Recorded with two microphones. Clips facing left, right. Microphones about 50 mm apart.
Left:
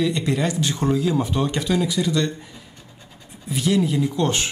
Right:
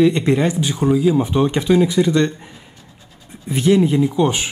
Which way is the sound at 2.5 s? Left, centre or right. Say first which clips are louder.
Right 1 dB; centre.